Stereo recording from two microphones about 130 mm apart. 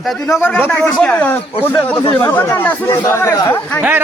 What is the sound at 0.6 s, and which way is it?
Speech, 10° left (ahead or behind).